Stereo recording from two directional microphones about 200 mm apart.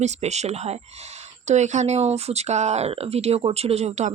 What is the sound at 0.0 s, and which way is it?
Speech, 35° right (ahead or behind).